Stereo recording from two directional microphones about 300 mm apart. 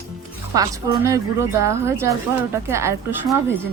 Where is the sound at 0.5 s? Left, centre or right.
Centre.